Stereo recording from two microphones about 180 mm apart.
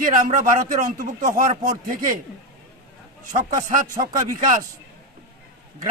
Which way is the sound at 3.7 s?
50° right (ahead or behind).